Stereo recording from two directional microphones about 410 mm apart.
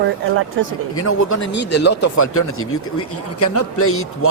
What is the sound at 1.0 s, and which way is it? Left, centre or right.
A man's voice, left.